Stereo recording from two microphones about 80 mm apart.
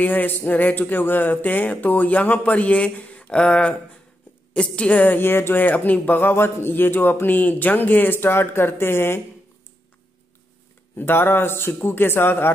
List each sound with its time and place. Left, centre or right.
0.0 s speech: left
11.0 s speech: left